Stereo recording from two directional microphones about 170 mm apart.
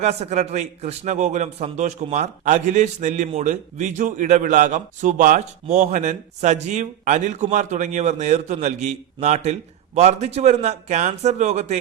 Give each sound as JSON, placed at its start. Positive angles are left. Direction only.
{"t": 0.0, "sound": "a man's voice", "side_deg": -40}